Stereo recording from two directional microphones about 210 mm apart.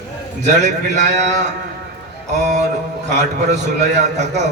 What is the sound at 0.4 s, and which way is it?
A man's voice, 35° right (ahead or behind).